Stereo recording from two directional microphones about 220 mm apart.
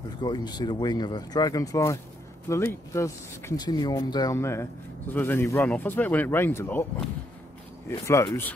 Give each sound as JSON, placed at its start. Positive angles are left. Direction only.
{"t": 0.2, "sound": "speech", "side_deg": 20}
{"t": 8.1, "sound": "speech", "side_deg": 15}